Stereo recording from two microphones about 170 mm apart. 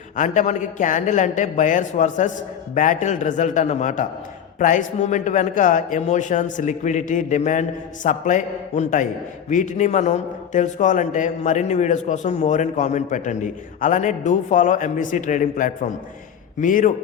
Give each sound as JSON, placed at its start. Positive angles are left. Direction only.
{"t": 0.2, "sound": "a man's voice", "side_deg": 45}